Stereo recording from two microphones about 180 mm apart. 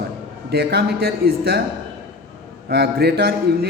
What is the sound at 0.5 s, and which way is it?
A man's voice, 60° right (ahead or behind).